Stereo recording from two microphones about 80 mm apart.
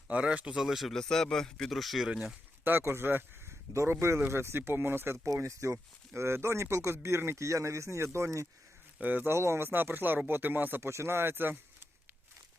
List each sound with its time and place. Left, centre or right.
0.1 s speech: centre
2.6 s speech: right
9.0 s speech: right
9.3 s speech: right